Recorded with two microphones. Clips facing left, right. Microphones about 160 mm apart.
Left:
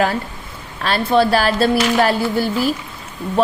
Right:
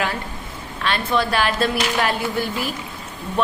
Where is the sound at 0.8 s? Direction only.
35° left (ahead or behind).